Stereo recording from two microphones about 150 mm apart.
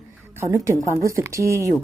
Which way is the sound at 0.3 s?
20° right (ahead or behind).